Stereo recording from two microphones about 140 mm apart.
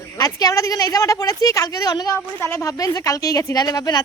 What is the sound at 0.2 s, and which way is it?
A woman's voice, 25° left (ahead or behind).